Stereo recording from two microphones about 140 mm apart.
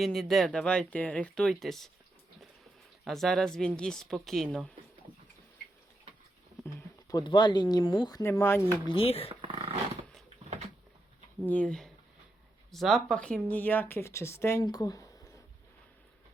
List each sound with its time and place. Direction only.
0.0 s speech: centre (ahead or behind)
3.0 s speech: centre (ahead or behind)
7.1 s speech: 30° left (ahead or behind)
8.2 s speech: 20° left (ahead or behind)
8.9 s speech: 45° left (ahead or behind)
9.3 s dog: 45° right (ahead or behind)
11.4 s speech: 10° left (ahead or behind); by 15.3 s 25° left (ahead or behind)